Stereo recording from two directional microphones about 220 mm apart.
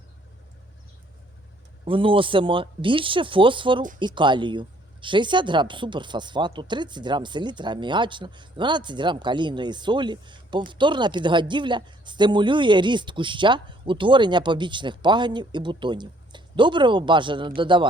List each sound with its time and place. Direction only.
1.8 s speech: 25° right (ahead or behind)